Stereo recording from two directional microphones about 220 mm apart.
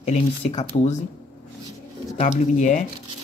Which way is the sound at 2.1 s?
35° left (ahead or behind).